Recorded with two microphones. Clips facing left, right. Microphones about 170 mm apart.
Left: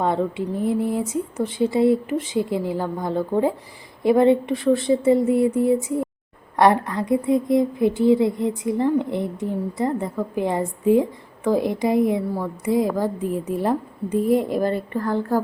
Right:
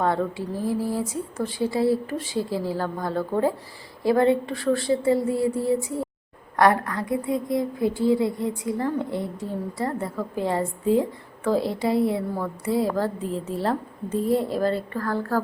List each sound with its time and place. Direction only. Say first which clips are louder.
0.0 s a woman's voice: left 2 dB; 20° left (ahead or behind)